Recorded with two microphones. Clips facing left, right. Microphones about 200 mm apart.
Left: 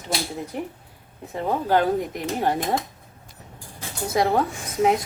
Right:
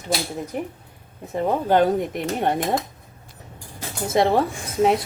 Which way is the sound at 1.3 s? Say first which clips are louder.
Right 3 dB; 20° right (ahead or behind).